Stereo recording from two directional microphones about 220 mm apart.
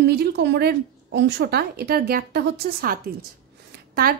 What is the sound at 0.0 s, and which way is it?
A woman's voice, 50° right (ahead or behind).